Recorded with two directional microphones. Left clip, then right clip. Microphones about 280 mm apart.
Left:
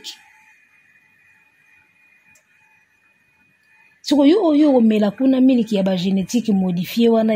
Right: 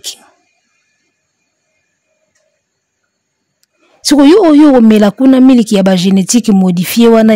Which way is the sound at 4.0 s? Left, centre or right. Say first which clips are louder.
Right 9 dB; right.